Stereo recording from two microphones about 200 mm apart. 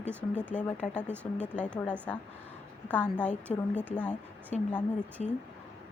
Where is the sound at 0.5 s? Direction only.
35° left (ahead or behind).